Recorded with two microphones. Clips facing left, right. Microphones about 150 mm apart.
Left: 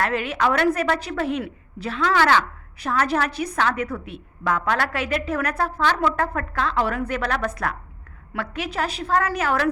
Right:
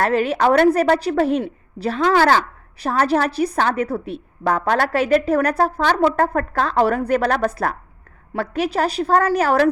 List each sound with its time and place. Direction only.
0.0 s a woman's voice: 35° right (ahead or behind)